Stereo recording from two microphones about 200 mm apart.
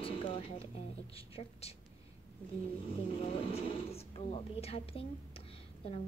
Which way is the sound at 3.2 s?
30° left (ahead or behind).